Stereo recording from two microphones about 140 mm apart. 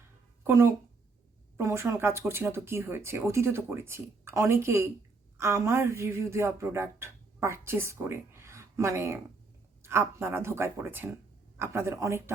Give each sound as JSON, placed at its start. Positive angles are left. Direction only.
{"t": 0.4, "sound": "speech", "side_deg": -20}